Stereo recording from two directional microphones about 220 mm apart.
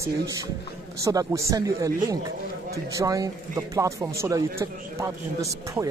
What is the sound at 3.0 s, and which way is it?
Speech, 15° right (ahead or behind).